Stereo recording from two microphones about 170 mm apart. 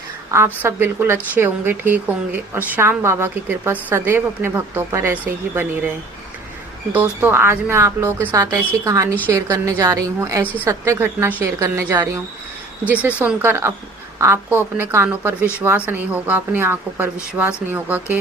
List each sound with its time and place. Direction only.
0.6 s speech: 15° right (ahead or behind)
6.9 s a woman's voice: 10° right (ahead or behind)
10.4 s a woman's voice: 10° left (ahead or behind)
10.7 s speech: 15° right (ahead or behind)